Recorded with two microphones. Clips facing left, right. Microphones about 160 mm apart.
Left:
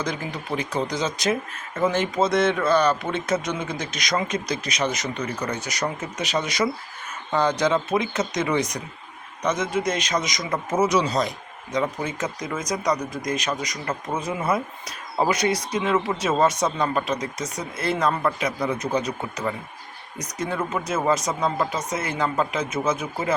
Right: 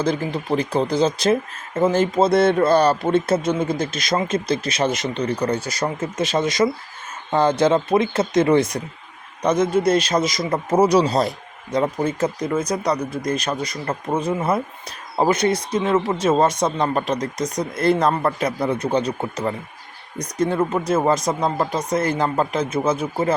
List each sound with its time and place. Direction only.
0.0 s speech: 30° right (ahead or behind)
3.5 s speech: 50° right (ahead or behind)
3.9 s speech: 25° right (ahead or behind)
6.0 s speech: 45° right (ahead or behind)
6.6 s speech: 20° right (ahead or behind)
8.3 s speech: 50° right (ahead or behind)
9.4 s speech: 30° right (ahead or behind)
17.3 s speech: 5° left (ahead or behind)
17.8 s speech: 35° right (ahead or behind)